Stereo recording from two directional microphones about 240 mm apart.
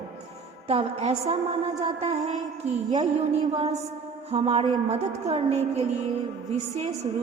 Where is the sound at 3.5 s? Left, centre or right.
Right.